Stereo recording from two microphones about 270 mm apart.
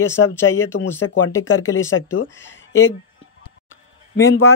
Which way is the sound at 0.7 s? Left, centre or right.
Left.